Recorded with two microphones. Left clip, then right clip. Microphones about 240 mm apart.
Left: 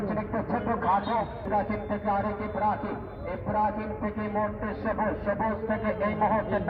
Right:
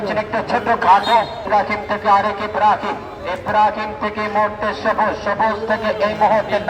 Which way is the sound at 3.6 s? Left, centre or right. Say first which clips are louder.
Right 12 dB; right.